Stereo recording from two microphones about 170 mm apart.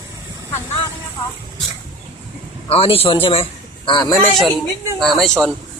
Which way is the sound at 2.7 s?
35° left (ahead or behind).